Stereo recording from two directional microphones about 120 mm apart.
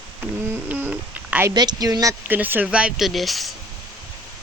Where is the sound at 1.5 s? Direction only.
35° right (ahead or behind).